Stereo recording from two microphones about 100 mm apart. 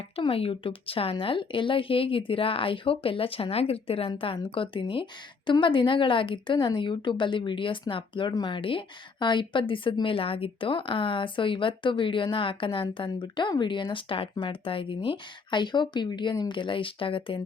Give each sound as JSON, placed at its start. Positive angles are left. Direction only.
{"t": 0.2, "sound": "a woman's voice", "side_deg": 70}